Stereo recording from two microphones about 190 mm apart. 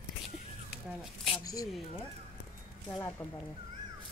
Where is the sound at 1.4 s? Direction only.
20° left (ahead or behind).